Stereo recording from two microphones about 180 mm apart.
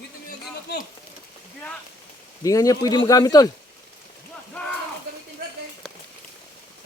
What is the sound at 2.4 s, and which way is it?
Speech, 20° left (ahead or behind).